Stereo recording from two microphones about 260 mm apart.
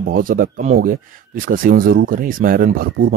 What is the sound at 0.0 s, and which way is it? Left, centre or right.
Speech, right.